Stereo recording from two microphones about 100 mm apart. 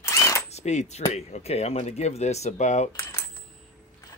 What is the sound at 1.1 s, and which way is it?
Speech, 90° left.